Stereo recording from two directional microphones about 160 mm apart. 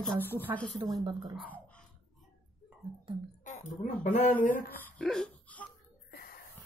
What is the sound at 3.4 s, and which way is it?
Speech, 50° left (ahead or behind).